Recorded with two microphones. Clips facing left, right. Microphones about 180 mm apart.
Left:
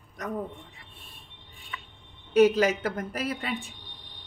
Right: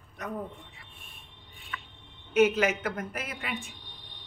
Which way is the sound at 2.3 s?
35° left (ahead or behind).